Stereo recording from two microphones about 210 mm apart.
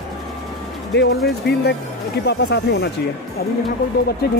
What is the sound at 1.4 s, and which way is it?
Speech, 50° left (ahead or behind).